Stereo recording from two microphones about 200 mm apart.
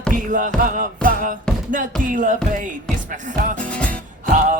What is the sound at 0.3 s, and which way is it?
Music, 40° right (ahead or behind).